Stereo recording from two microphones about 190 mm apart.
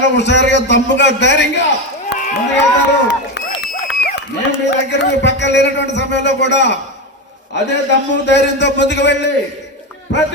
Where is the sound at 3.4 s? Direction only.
65° left (ahead or behind).